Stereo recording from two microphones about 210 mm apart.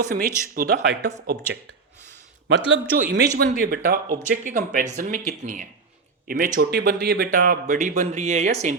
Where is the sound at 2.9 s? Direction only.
40° right (ahead or behind).